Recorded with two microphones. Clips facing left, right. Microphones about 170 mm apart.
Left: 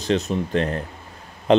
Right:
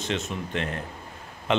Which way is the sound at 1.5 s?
35° left (ahead or behind).